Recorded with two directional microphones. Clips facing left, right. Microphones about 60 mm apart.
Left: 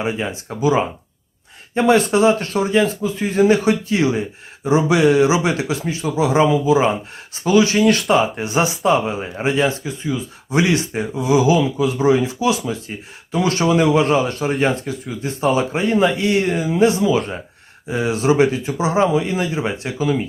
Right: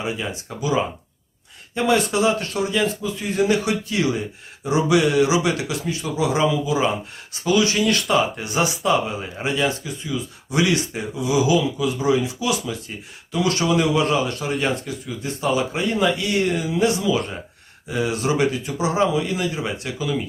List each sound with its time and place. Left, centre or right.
0.0 s speech: left